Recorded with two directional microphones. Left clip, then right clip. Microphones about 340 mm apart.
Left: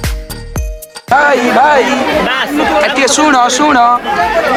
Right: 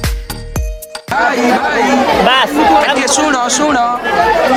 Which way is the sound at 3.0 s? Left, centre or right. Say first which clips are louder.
Left 4 dB; centre.